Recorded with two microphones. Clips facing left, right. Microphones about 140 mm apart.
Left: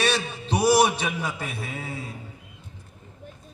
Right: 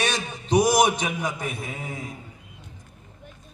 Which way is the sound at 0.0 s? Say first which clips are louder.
Left 2 dB; 15° right (ahead or behind).